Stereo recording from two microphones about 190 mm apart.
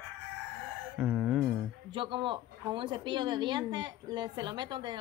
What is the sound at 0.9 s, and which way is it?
Music, 5° right (ahead or behind).